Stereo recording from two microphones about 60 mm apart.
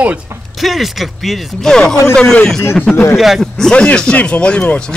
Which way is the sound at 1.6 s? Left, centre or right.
Centre.